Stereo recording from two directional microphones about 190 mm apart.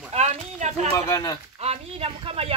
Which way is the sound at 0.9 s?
20° left (ahead or behind).